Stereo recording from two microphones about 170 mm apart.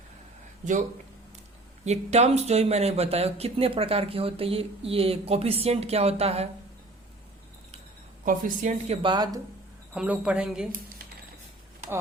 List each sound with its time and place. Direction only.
0.6 s speech: 45° right (ahead or behind)
8.2 s a woman's voice: 50° right (ahead or behind)
9.0 s speech: 25° right (ahead or behind)
9.9 s a woman's voice: 5° right (ahead or behind)